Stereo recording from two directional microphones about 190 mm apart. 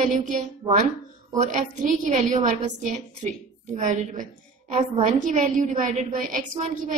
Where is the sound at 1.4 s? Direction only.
40° right (ahead or behind).